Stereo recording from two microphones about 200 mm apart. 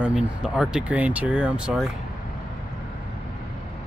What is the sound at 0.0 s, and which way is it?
Speech, 5° right (ahead or behind).